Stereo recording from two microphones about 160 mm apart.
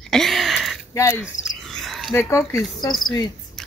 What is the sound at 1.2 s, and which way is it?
Cricket, centre (ahead or behind).